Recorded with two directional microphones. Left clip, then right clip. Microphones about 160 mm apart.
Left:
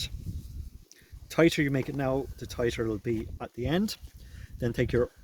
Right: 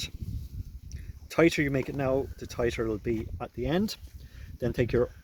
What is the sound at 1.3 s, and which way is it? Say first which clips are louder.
Speech: even; 25° left (ahead or behind).